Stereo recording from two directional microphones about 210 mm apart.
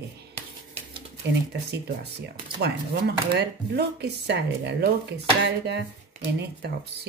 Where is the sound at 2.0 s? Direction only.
50° right (ahead or behind).